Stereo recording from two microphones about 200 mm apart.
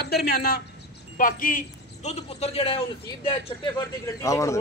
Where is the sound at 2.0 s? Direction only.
30° left (ahead or behind).